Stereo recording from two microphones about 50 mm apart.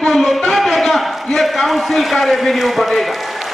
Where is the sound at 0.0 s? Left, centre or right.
Centre.